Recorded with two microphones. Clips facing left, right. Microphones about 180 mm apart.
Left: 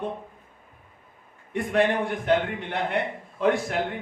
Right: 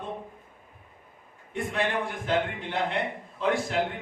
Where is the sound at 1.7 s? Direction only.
60° left (ahead or behind).